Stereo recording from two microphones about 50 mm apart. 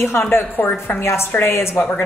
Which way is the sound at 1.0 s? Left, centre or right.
Left.